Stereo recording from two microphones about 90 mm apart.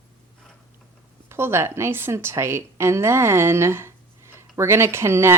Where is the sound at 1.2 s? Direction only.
30° right (ahead or behind).